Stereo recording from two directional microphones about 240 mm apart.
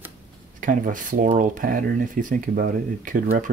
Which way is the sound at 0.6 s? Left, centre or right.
Right.